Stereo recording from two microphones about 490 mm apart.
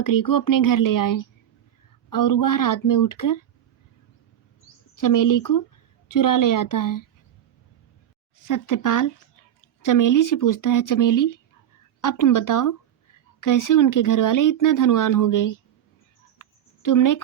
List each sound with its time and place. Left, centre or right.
0.0 s speech: left
4.9 s speech: left
8.4 s speech: left
16.4 s a sound: left